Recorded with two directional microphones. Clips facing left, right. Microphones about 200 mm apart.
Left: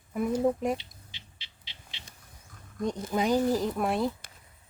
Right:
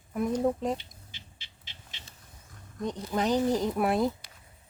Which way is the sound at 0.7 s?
50° right (ahead or behind).